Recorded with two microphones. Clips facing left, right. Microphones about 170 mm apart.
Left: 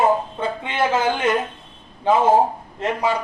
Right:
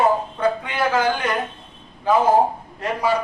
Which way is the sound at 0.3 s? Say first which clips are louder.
Right 2 dB; 25° left (ahead or behind).